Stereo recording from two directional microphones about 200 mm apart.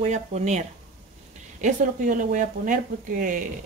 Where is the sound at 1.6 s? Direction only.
40° right (ahead or behind).